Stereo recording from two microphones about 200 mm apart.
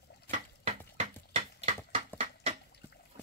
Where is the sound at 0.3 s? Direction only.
30° right (ahead or behind).